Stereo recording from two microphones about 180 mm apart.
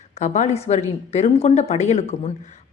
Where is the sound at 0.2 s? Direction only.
40° left (ahead or behind).